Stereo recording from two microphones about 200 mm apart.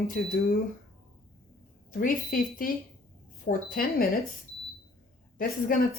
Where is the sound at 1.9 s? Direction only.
45° left (ahead or behind).